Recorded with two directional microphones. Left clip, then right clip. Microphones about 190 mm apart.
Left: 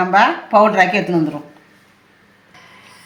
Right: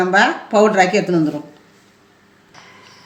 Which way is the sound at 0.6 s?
5° left (ahead or behind).